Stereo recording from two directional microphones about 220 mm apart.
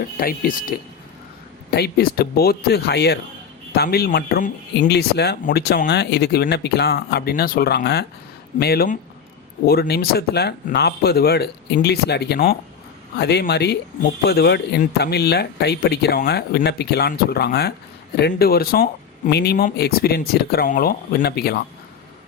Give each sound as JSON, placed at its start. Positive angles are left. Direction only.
{"t": 0.2, "sound": "speech", "side_deg": 40}
{"t": 1.7, "sound": "speech", "side_deg": 45}